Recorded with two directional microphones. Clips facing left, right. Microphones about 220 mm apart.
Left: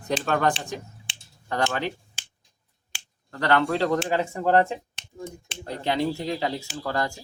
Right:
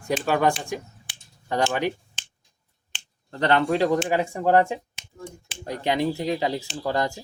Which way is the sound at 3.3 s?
20° right (ahead or behind).